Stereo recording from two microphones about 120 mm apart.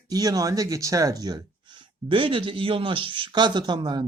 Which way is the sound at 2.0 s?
45° right (ahead or behind).